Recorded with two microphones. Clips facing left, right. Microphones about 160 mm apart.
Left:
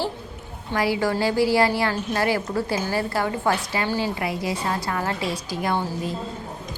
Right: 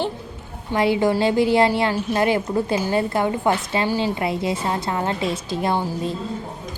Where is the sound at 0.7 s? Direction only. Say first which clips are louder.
Right 4 dB; 25° right (ahead or behind).